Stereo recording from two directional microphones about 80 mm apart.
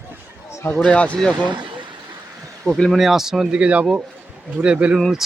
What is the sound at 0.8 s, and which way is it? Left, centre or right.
Speech, centre.